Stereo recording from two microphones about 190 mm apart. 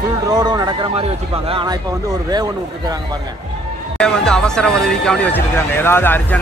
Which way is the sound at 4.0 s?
5° left (ahead or behind).